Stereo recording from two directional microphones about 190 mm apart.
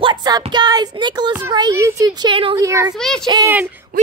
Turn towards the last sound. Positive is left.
turn(degrees=-10)  # may be behind; listen again after turning